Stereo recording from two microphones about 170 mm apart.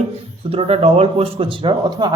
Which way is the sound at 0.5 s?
35° right (ahead or behind).